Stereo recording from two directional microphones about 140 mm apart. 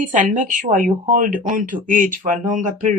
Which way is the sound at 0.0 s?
65° right (ahead or behind).